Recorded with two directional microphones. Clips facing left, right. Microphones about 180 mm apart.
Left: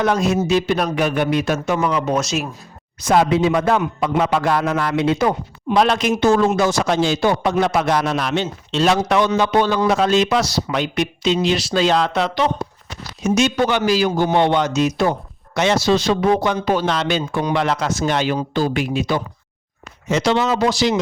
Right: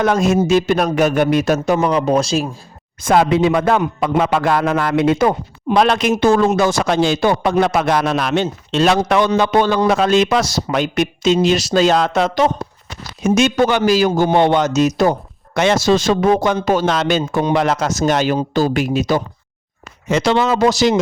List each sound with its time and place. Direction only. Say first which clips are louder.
0.0 s a man's voice: right 3 dB; 50° right (ahead or behind); by 2.5 s 30° right (ahead or behind)
3.0 s a man's voice: right 2 dB; 55° right (ahead or behind)
5.8 s a man's voice: right 2 dB; 60° right (ahead or behind); by 12.5 s 45° right (ahead or behind)
13.2 s a man's voice: right 3 dB; 55° right (ahead or behind)
20.1 s a man's voice: right 2 dB; 55° right (ahead or behind)